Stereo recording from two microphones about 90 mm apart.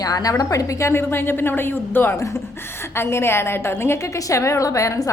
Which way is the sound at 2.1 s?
35° left (ahead or behind).